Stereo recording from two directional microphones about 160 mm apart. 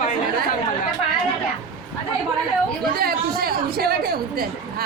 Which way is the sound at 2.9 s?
70° right (ahead or behind).